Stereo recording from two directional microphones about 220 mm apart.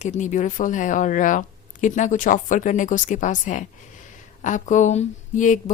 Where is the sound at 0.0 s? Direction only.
35° left (ahead or behind).